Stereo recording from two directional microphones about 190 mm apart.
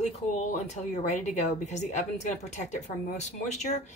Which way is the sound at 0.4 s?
40° left (ahead or behind).